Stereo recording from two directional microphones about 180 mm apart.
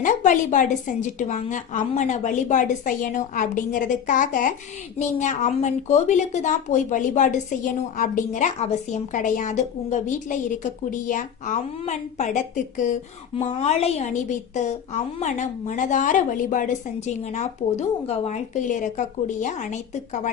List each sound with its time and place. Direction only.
0.0 s a woman's voice: 45° left (ahead or behind)